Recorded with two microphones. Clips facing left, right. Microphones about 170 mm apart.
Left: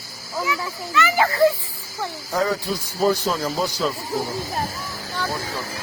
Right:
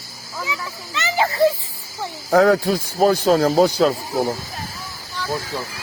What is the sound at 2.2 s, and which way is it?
Speech, 65° right (ahead or behind).